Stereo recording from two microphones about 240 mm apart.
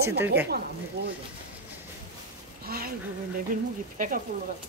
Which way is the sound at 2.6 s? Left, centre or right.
Right.